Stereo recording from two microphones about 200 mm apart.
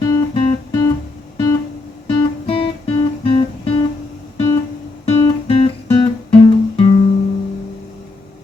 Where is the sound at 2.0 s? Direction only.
30° left (ahead or behind).